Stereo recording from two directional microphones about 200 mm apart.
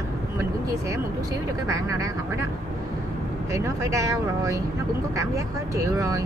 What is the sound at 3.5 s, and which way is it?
Speech, 15° right (ahead or behind).